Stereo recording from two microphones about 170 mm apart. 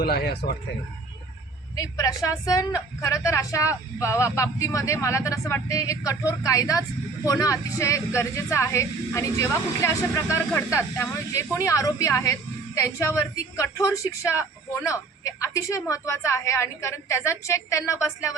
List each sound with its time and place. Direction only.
0.0 s speech: 70° left (ahead or behind)
1.7 s a woman's voice: 20° left (ahead or behind)